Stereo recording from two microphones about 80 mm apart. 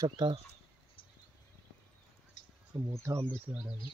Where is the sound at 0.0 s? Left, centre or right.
Right.